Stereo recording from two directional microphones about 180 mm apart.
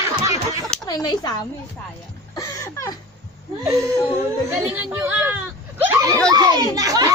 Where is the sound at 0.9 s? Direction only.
20° left (ahead or behind).